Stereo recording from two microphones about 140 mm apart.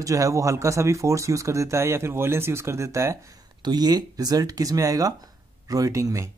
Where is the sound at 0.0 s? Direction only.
25° right (ahead or behind).